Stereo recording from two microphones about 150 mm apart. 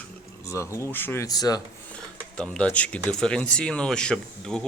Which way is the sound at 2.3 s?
5° left (ahead or behind).